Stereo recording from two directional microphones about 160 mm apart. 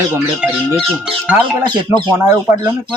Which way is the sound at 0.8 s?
Centre (ahead or behind).